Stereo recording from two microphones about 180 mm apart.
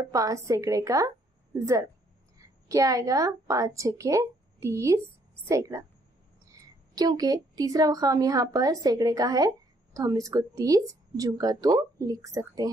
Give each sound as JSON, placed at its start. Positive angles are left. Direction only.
{"t": 0.0, "sound": "a woman's voice", "side_deg": -20}
{"t": 7.0, "sound": "speech", "side_deg": -20}